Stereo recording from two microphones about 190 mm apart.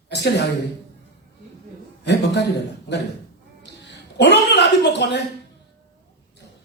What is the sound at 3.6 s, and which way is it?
A woman's voice, 65° left (ahead or behind).